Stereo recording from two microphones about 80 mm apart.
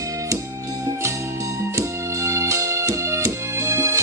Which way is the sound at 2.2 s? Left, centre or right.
Right.